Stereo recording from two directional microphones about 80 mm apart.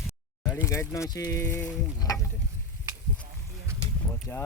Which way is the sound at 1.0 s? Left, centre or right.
Left.